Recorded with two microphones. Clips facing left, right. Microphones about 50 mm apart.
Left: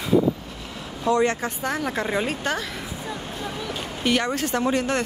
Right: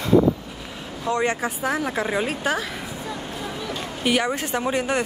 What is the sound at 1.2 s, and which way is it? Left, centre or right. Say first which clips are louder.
Speech: even; centre.